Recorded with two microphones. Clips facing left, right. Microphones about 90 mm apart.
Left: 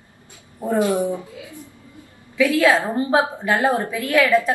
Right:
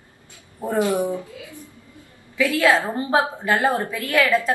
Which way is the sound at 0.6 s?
20° left (ahead or behind).